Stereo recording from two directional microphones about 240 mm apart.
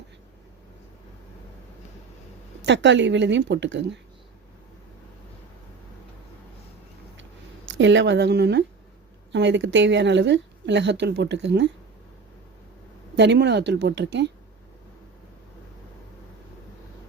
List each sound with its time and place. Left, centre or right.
2.6 s a woman's voice: right
7.7 s a woman's voice: right
13.1 s a woman's voice: right